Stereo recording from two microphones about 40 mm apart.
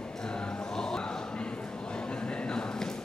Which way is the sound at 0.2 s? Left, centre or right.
Left.